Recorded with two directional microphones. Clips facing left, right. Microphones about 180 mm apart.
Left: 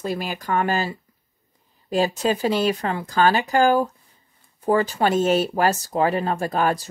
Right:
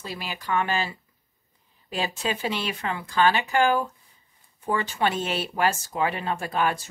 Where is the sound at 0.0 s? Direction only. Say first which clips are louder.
Left 8 dB; 50° left (ahead or behind).